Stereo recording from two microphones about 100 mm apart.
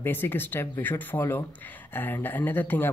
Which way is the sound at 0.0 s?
20° left (ahead or behind).